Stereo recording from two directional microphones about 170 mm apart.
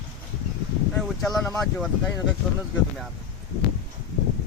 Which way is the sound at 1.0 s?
Centre (ahead or behind).